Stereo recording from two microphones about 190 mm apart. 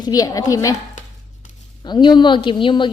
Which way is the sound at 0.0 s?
20° left (ahead or behind).